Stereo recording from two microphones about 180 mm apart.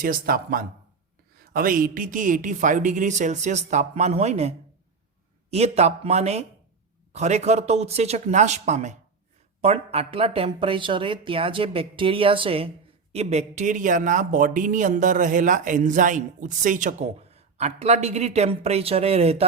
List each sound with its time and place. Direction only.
0.0 s speech: 55° right (ahead or behind); by 19.5 s 35° right (ahead or behind)